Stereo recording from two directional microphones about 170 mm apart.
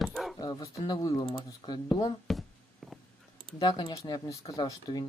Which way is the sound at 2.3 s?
Centre (ahead or behind).